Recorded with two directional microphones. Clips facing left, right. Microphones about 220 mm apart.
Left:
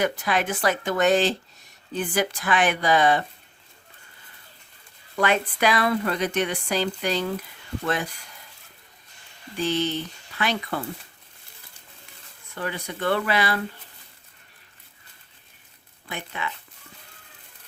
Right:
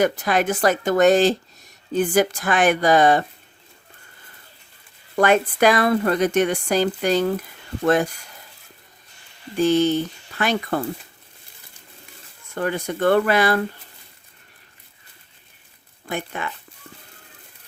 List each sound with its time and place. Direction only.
0.0 s speech: 45° right (ahead or behind)
5.1 s speech: 45° right (ahead or behind)
9.6 s speech: 45° right (ahead or behind)
12.5 s speech: 45° right (ahead or behind)
16.0 s speech: 45° right (ahead or behind)